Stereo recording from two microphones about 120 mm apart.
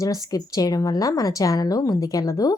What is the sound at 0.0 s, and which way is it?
Speech, 30° left (ahead or behind).